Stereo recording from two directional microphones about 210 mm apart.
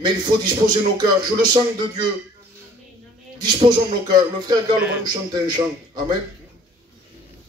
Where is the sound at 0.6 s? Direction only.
20° right (ahead or behind).